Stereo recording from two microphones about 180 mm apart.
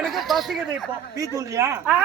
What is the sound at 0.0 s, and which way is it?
Speech, centre (ahead or behind).